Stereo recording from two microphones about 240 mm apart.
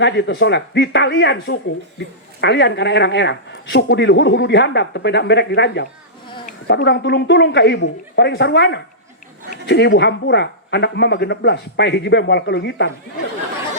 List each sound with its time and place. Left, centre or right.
0.0 s a woman's voice: left